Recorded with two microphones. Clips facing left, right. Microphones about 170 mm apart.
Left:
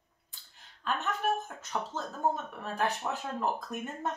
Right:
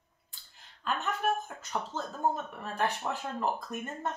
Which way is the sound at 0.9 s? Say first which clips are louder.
Even; centre (ahead or behind).